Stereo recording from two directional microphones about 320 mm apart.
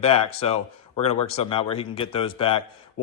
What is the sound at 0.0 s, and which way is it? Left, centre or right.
Speech, centre.